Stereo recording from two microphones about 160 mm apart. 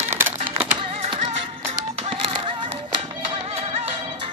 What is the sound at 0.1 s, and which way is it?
Music, 15° right (ahead or behind).